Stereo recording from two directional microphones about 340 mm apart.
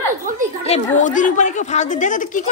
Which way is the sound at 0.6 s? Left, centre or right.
Centre.